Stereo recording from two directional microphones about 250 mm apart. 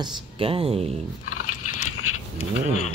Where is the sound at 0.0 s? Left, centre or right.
Right.